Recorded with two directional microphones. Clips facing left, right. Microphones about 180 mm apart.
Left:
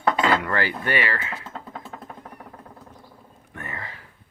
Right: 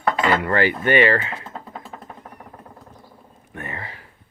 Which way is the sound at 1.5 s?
5° right (ahead or behind).